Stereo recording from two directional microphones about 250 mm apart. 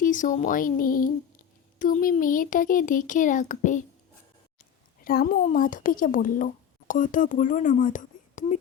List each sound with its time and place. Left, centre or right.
0.0 s speech: left
5.0 s speech: left